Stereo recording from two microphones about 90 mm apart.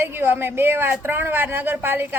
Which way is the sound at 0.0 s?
25° right (ahead or behind).